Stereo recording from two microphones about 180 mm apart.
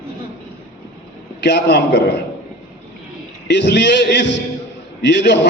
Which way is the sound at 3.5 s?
70° left (ahead or behind).